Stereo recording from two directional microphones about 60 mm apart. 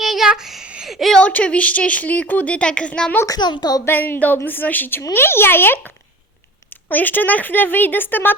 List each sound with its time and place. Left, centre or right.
0.0 s a sound: centre
0.3 s a woman's voice: centre
1.2 s speech: left
3.2 s speech: left
3.8 s a woman's voice: left